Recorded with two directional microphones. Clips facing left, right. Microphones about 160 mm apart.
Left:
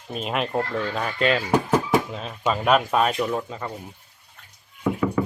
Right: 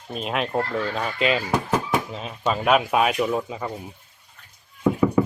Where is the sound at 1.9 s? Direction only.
Centre (ahead or behind).